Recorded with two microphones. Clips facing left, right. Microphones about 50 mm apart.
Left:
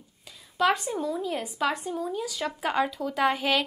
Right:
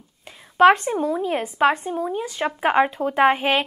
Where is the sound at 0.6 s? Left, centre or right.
Right.